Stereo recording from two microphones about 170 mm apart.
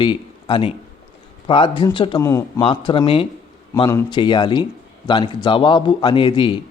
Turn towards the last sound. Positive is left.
turn(degrees=30)  # may be behind; listen again after turning